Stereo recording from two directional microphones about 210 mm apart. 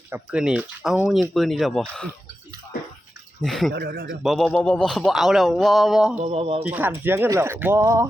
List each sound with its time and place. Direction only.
0.1 s speech: 5° right (ahead or behind)
3.4 s speech: centre (ahead or behind)
3.7 s speech: 45° right (ahead or behind)
4.2 s speech: centre (ahead or behind)
6.2 s speech: 25° right (ahead or behind)
6.6 s speech: 5° right (ahead or behind)